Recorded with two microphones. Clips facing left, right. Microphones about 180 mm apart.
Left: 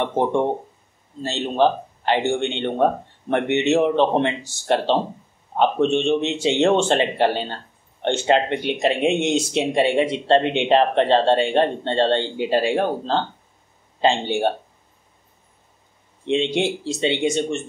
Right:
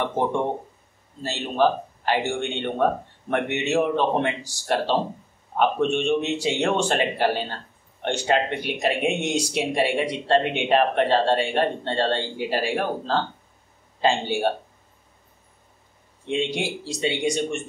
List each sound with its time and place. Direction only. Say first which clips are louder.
1.2 s speech: left 3 dB; 25° left (ahead or behind)
16.3 s speech: left 5 dB; 25° left (ahead or behind)